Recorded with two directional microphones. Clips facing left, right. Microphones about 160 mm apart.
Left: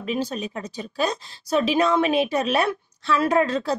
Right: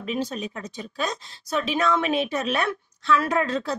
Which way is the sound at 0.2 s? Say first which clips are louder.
Left 2 dB; 30° left (ahead or behind).